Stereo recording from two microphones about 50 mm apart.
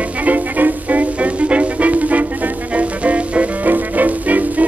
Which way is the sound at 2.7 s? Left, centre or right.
Right.